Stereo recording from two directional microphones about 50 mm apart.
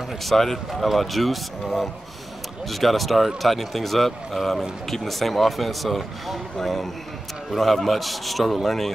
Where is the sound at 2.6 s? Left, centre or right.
Centre.